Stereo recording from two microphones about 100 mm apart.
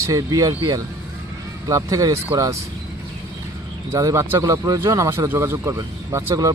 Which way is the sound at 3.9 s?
30° right (ahead or behind).